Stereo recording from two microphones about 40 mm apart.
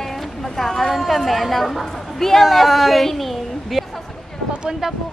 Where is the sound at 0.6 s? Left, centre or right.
Centre.